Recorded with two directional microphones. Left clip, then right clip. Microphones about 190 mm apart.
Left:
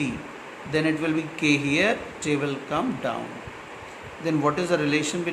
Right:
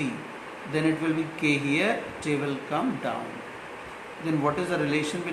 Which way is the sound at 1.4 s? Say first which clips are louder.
Left 4 dB; 50° left (ahead or behind).